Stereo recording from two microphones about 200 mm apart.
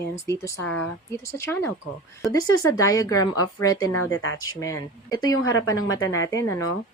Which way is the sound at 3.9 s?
90° left.